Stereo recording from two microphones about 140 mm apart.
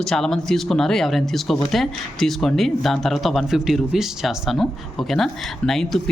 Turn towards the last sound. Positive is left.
turn(degrees=5)  # may be behind; listen again after turning